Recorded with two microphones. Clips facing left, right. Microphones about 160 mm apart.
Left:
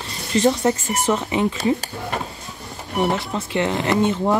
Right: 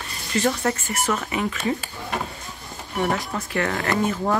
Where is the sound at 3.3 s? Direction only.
20° left (ahead or behind).